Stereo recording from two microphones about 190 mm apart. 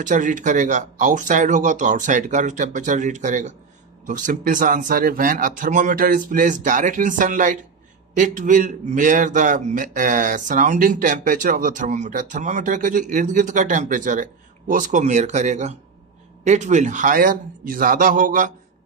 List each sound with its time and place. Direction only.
0.0 s a man's voice: 45° right (ahead or behind)